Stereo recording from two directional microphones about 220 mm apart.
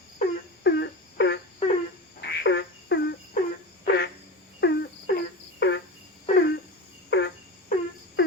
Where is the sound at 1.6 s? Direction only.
25° left (ahead or behind).